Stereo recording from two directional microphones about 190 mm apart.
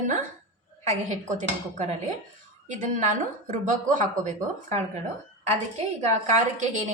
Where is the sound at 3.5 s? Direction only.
40° right (ahead or behind).